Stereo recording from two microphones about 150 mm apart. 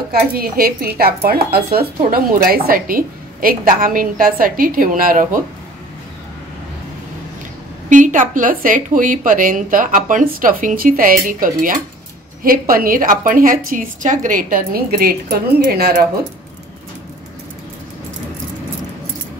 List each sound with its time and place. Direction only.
0.1 s speech: 85° right
2.0 s a woman's voice: 75° right (ahead or behind)
7.9 s a woman's voice: 60° right (ahead or behind); by 16.1 s 85° right